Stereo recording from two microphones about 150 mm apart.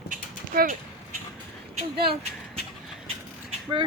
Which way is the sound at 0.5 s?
75° right (ahead or behind).